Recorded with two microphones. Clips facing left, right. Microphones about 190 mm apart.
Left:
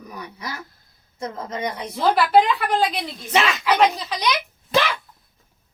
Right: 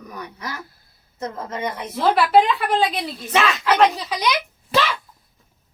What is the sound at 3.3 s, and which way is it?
Speech, 10° left (ahead or behind).